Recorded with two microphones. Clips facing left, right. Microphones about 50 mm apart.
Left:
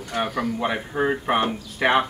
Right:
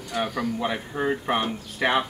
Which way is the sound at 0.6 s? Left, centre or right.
Left.